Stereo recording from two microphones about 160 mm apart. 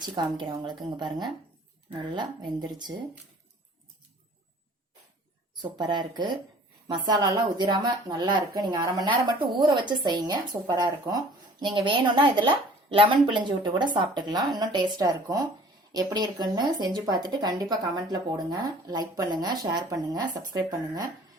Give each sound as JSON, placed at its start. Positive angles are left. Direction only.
{"t": 0.0, "sound": "speech", "side_deg": -25}
{"t": 5.7, "sound": "a woman's voice", "side_deg": -25}